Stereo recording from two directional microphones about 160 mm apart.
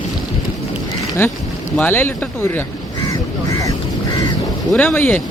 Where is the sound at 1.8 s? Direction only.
10° left (ahead or behind).